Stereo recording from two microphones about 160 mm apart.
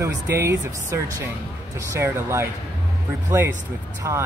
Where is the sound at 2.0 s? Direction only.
15° right (ahead or behind).